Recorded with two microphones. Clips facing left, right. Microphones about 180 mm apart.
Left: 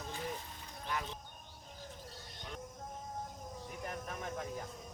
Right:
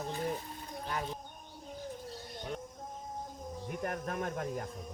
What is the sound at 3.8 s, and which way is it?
Speech, 60° right (ahead or behind).